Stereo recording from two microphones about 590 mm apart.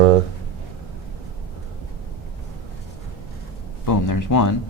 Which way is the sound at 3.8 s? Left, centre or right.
Left.